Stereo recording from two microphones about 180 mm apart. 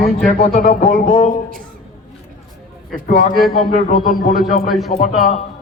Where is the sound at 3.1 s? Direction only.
50° left (ahead or behind).